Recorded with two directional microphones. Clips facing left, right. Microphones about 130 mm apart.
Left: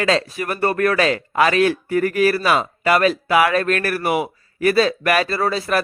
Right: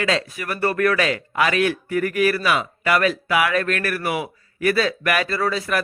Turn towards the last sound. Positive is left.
turn(degrees=30)  # may be behind; listen again after turning